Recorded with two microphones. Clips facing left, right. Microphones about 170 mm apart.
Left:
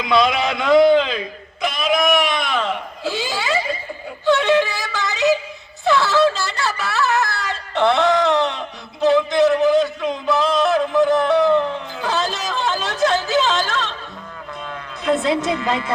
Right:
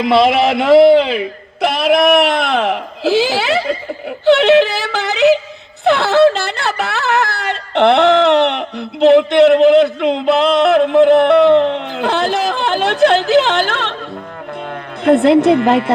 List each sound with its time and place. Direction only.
0.9 s speech: 30° right (ahead or behind)
1.6 s speech: 65° right (ahead or behind)
15.0 s speech: 60° right (ahead or behind)